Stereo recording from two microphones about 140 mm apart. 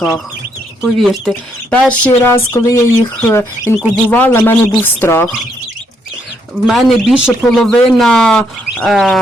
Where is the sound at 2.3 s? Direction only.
20° left (ahead or behind).